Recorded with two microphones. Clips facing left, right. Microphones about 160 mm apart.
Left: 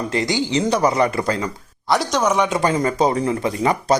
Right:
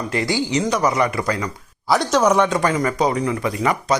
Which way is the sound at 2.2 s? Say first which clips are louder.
Right 3 dB; 5° left (ahead or behind).